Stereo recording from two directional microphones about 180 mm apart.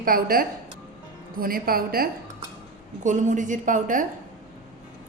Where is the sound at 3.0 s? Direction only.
45° right (ahead or behind).